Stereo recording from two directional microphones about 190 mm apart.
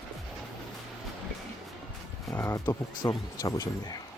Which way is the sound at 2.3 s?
15° left (ahead or behind).